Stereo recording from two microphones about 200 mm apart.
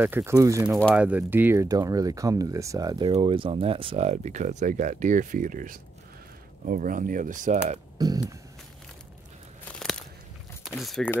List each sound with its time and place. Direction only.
0.0 s speech: 10° right (ahead or behind); by 7.6 s 40° right (ahead or behind)
8.0 s a sound: 20° right (ahead or behind)
9.7 s crunch: 5° left (ahead or behind)
10.6 s speech: centre (ahead or behind)